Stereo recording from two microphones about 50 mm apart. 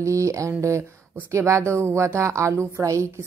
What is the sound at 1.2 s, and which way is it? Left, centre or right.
A woman's voice, right.